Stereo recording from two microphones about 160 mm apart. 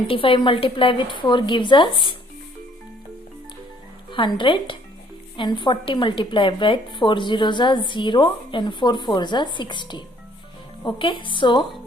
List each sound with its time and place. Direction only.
0.1 s a woman's voice: 35° left (ahead or behind)
4.1 s a woman's voice: 30° left (ahead or behind)